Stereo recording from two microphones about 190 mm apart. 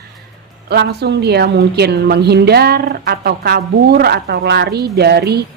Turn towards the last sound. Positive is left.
turn(degrees=-60)  # may be behind; listen again after turning